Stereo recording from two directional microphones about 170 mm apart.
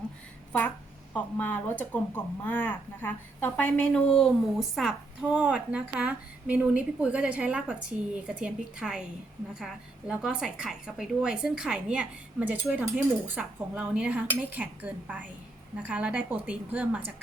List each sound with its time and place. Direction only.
1.1 s a woman's voice: 10° left (ahead or behind); by 17.0 s 10° right (ahead or behind)